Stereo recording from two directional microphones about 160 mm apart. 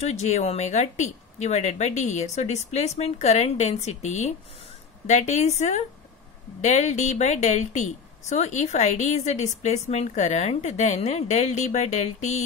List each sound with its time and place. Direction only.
0.0 s a woman's voice: 45° left (ahead or behind)